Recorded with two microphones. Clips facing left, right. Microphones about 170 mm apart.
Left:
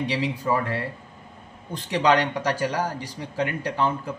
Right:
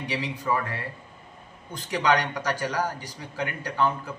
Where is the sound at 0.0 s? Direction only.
30° left (ahead or behind).